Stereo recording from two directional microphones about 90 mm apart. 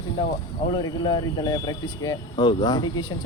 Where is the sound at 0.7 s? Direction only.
60° left (ahead or behind).